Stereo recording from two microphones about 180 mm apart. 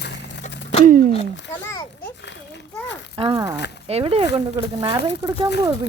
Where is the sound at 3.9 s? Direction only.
30° right (ahead or behind).